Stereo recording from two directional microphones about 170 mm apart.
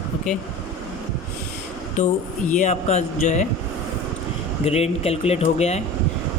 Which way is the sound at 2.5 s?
45° left (ahead or behind).